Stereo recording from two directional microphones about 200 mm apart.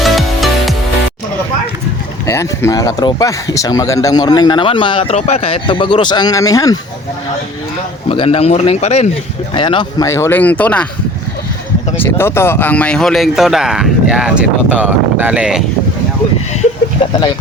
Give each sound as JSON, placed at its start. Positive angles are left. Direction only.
{"t": 0.0, "sound": "music", "side_deg": 0}
{"t": 2.2, "sound": "speech", "side_deg": 15}
{"t": 8.1, "sound": "speech", "side_deg": 30}
{"t": 12.0, "sound": "speech", "side_deg": 10}